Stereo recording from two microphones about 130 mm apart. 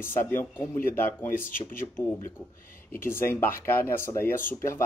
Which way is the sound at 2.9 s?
15° left (ahead or behind).